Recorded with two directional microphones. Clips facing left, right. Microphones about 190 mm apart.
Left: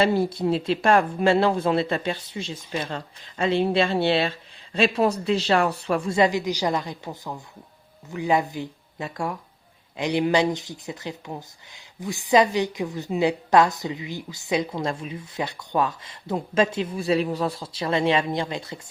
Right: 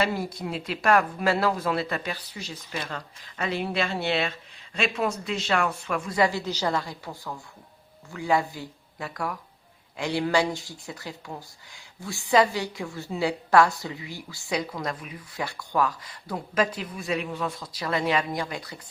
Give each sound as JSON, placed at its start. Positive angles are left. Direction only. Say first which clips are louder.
{"t": 0.0, "sound": "speech", "louder": "left 7 dB", "side_deg": 30}